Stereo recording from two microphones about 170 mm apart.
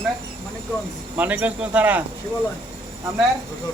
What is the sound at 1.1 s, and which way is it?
Speech, 10° right (ahead or behind).